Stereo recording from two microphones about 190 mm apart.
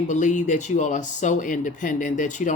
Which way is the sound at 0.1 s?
40° left (ahead or behind).